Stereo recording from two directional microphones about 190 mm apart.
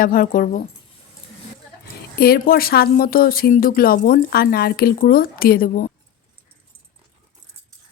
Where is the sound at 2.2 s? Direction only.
50° left (ahead or behind).